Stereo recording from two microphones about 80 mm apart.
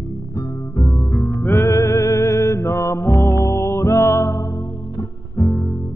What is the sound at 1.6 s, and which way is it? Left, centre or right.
Music, left.